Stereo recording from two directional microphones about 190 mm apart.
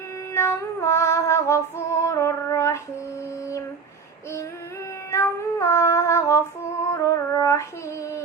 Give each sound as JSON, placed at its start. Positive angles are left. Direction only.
{"t": 0.3, "sound": "child singing", "side_deg": 15}
{"t": 5.1, "sound": "cat", "side_deg": 15}